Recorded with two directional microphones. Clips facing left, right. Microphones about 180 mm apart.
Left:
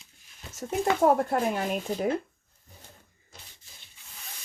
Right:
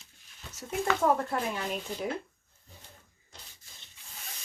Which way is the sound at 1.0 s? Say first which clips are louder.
Left 6 dB; 45° left (ahead or behind).